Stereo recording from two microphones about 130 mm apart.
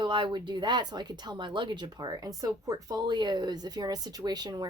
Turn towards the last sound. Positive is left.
turn(degrees=-30)  # may be behind; listen again after turning